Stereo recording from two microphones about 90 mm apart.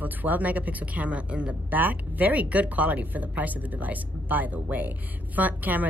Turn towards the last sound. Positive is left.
turn(degrees=-20)  # may be behind; listen again after turning